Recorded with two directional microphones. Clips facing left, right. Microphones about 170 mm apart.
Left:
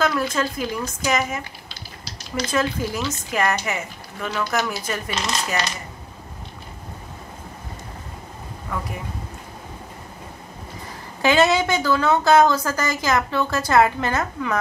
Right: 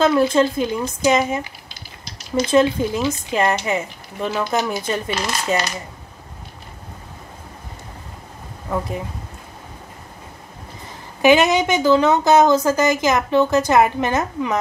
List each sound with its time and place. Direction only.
0.0 s a woman's voice: 25° right (ahead or behind)
2.5 s a woman's voice: 25° right (ahead or behind)
5.1 s speech: centre (ahead or behind)
8.7 s a woman's voice: 25° right (ahead or behind)
11.2 s a woman's voice: 15° right (ahead or behind)